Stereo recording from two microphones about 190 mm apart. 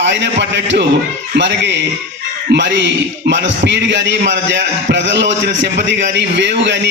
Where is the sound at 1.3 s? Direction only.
65° right (ahead or behind).